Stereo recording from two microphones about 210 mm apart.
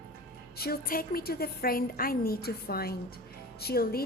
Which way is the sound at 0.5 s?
45° left (ahead or behind).